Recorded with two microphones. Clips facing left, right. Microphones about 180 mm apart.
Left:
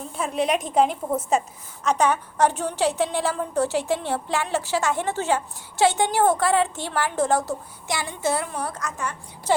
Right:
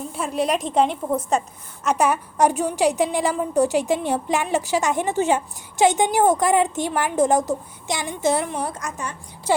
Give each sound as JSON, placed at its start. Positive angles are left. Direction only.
{"t": 0.2, "sound": "a woman's voice", "side_deg": 0}
{"t": 1.8, "sound": "a woman's voice", "side_deg": -5}